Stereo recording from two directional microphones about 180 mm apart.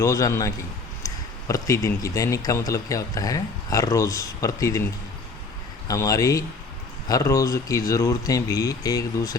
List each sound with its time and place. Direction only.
0.0 s speech: 15° left (ahead or behind)
5.9 s speech: 20° left (ahead or behind)